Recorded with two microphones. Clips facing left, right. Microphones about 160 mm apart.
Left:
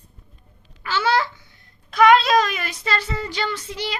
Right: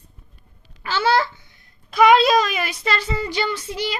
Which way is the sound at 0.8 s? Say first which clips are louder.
Right 2 dB; 35° right (ahead or behind).